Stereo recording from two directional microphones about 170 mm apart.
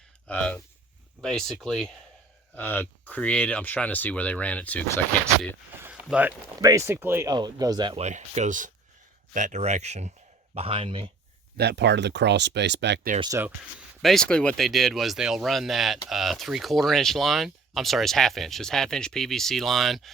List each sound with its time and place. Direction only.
0.3 s speech: 10° left (ahead or behind)
5.8 s a sound: 5° right (ahead or behind)
6.6 s speech: 20° right (ahead or behind)
7.9 s speech: 40° right (ahead or behind)
11.5 s speech: 75° right (ahead or behind)
13.1 s speech: 25° right (ahead or behind)
13.4 s speech: 5° right (ahead or behind)